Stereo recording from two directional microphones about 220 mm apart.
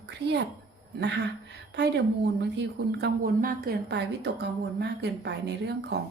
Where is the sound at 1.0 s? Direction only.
50° right (ahead or behind).